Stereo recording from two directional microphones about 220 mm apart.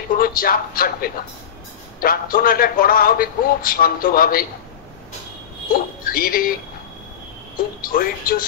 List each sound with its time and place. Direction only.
0.2 s a man's voice: 40° left (ahead or behind)
5.7 s speech: 40° left (ahead or behind)
7.8 s a man's voice: 40° left (ahead or behind)